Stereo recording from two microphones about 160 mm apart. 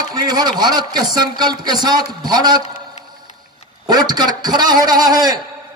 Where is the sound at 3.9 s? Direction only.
25° right (ahead or behind).